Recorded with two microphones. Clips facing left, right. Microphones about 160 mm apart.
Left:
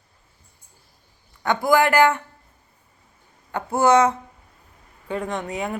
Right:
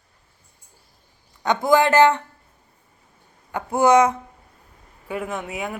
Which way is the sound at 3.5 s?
15° right (ahead or behind).